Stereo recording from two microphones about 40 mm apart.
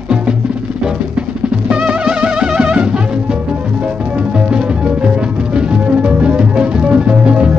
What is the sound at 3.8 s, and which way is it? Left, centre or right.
Music, right.